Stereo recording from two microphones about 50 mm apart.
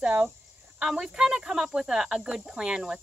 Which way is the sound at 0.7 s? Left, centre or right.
Centre.